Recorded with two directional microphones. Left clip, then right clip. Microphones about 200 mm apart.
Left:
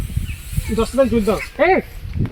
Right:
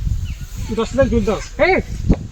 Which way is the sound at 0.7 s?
20° left (ahead or behind).